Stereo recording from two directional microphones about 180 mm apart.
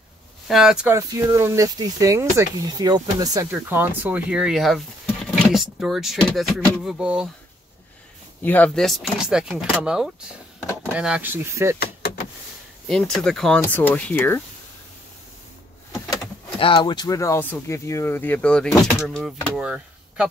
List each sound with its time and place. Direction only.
0.5 s speech: centre (ahead or behind)
0.9 s speech: 15° right (ahead or behind)
8.4 s speech: 10° left (ahead or behind); by 11.8 s 15° right (ahead or behind)
11.8 s vehicle: 60° left (ahead or behind)
12.8 s speech: 5° left (ahead or behind)
16.5 s speech: 25° left (ahead or behind); by 20.2 s 5° right (ahead or behind)